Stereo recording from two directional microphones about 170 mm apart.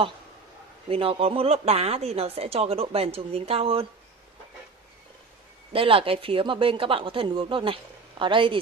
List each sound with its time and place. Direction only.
0.8 s a woman's voice: 35° right (ahead or behind)
5.7 s a woman's voice: 35° right (ahead or behind)